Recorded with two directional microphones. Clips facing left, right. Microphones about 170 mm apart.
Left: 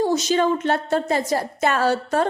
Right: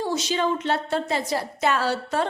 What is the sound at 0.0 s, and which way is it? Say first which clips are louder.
A woman's voice: left 5 dB; 45° left (ahead or behind).